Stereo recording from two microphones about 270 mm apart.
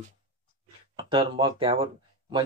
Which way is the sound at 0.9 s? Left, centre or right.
Centre.